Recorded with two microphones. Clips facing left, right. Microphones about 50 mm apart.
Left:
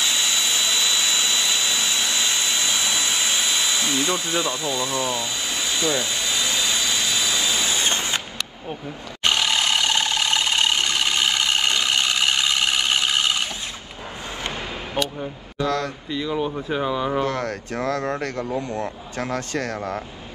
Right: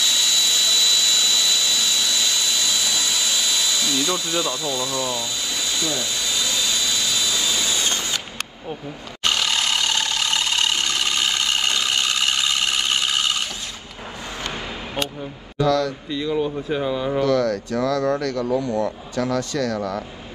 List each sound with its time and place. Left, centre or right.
0.0 s jet engine: left
9.2 s a sound: left
15.5 s speech: left
16.1 s speech: centre
17.2 s speech: left